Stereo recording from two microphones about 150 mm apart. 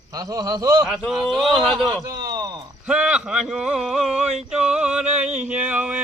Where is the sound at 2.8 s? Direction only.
5° right (ahead or behind).